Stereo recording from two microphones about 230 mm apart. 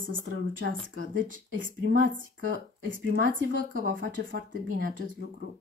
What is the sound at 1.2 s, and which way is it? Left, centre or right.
Speech, right.